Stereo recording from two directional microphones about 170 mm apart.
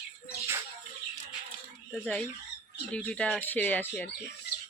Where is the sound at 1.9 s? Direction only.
5° left (ahead or behind).